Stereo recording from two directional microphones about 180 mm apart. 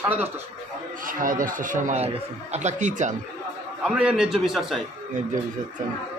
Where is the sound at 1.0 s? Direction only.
50° right (ahead or behind).